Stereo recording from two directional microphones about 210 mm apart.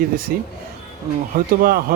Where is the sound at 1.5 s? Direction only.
45° right (ahead or behind).